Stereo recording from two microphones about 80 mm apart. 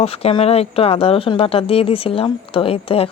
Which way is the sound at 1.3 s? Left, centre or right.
Left.